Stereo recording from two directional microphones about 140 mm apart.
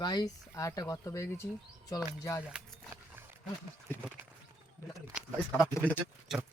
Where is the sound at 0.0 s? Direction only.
30° left (ahead or behind).